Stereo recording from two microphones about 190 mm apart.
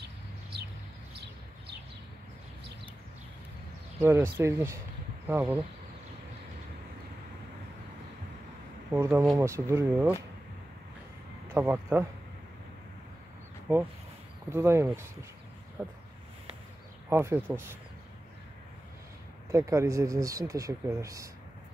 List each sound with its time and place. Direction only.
4.0 s speech: 10° right (ahead or behind)
8.9 s speech: 15° right (ahead or behind)
11.5 s speech: 10° right (ahead or behind)
13.7 s speech: 10° right (ahead or behind)
17.1 s speech: 15° right (ahead or behind)
19.5 s speech: 15° right (ahead or behind)